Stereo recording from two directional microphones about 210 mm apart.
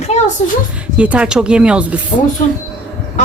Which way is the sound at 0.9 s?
5° right (ahead or behind).